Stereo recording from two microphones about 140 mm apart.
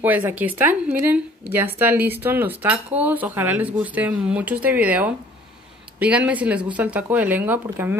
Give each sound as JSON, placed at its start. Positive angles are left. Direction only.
{"t": 0.0, "sound": "a woman's voice", "side_deg": -10}